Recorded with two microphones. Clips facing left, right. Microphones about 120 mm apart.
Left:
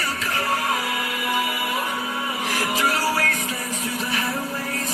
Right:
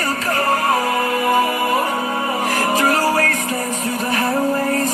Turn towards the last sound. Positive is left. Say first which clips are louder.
# right 11 dB
turn(degrees=-50)  # may be behind; listen again after turning